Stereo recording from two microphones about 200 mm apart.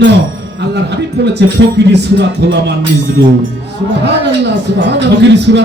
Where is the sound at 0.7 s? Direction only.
60° right (ahead or behind).